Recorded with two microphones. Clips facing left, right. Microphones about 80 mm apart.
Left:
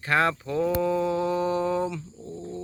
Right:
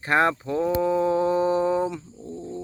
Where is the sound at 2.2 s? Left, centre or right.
Centre.